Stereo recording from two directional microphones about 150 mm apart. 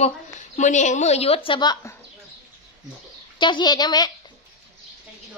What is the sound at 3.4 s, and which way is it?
Speech, 30° left (ahead or behind).